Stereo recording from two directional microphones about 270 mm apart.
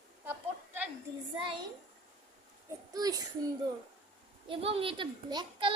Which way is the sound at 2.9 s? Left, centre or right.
Centre.